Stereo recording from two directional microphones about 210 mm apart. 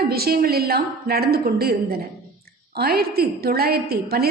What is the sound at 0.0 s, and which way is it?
A woman's voice, 45° right (ahead or behind).